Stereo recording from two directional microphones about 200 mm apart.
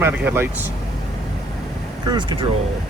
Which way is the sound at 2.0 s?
25° right (ahead or behind).